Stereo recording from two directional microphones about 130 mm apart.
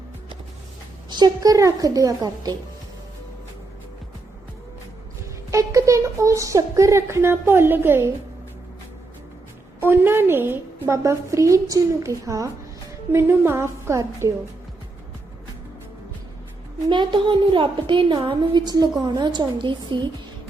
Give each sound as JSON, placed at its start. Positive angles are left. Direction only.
{"t": 1.1, "sound": "a woman's voice", "side_deg": -30}
{"t": 5.5, "sound": "a woman's voice", "side_deg": -25}
{"t": 9.8, "sound": "a woman's voice", "side_deg": -15}
{"t": 16.9, "sound": "a woman's voice", "side_deg": -35}